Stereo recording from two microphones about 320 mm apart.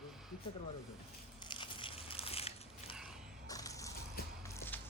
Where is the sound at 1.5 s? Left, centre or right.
Centre.